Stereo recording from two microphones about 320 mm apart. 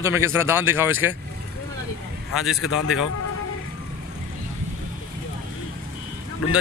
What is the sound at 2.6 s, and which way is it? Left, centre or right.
Speech, left.